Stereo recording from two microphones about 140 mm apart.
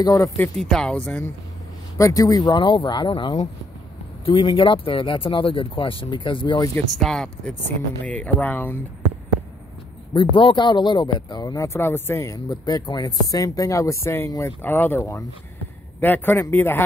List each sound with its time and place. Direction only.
0.0 s speech: 25° left (ahead or behind)
0.6 s speech: 5° left (ahead or behind)
2.0 s speech: 25° left (ahead or behind)
7.0 s speech: 5° left (ahead or behind)
10.1 s speech: 35° left (ahead or behind); by 16.8 s 15° left (ahead or behind)